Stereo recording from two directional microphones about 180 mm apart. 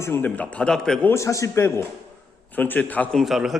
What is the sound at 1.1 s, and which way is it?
A man's voice, 15° left (ahead or behind).